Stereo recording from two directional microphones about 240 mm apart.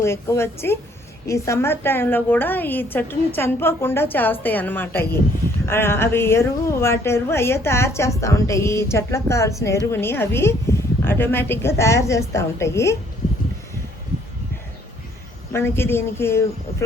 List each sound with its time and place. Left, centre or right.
0.0 s a woman's voice: centre
15.5 s a woman's voice: centre